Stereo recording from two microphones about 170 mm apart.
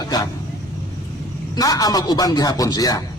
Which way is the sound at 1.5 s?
20° left (ahead or behind).